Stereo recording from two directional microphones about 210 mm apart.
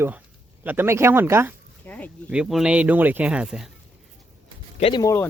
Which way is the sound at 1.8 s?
5° left (ahead or behind).